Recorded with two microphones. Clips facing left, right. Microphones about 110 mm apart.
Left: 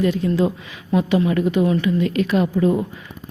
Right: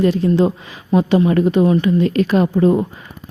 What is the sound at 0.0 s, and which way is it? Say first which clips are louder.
A woman's voice: right 4 dB; 30° right (ahead or behind).